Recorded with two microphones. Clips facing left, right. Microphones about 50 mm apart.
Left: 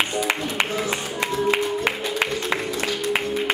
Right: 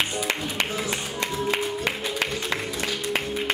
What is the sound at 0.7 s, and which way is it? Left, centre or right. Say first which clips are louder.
Music: left 3 dB; centre.